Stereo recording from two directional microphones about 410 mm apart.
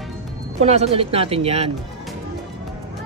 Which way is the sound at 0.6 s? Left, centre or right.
Centre.